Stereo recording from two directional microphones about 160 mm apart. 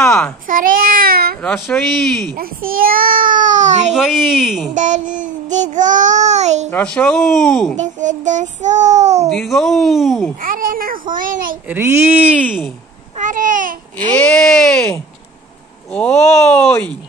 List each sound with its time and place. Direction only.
0.0 s babbling: 10° left (ahead or behind)
0.5 s speech: 60° right (ahead or behind)
1.4 s speech: 5° left (ahead or behind)
2.3 s a child's voice: 65° right (ahead or behind); by 3.9 s 50° right (ahead or behind)
3.9 s speech: 5° right (ahead or behind)
4.7 s child singing: 50° right (ahead or behind)
6.7 s speech: 10° left (ahead or behind)
7.7 s child singing: 50° right (ahead or behind)
9.3 s speech: centre (ahead or behind)
10.4 s a child's voice: 60° right (ahead or behind)
11.6 s speech: 15° right (ahead or behind)
13.2 s a child's voice: 55° right (ahead or behind)
14.1 s speech: 5° left (ahead or behind)